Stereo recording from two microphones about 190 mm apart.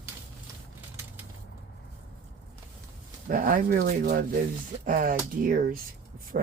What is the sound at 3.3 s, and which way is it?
Speech, 45° right (ahead or behind).